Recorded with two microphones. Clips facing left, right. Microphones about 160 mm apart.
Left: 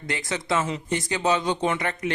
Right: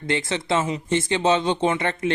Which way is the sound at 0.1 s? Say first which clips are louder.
Right 3 dB; 25° right (ahead or behind).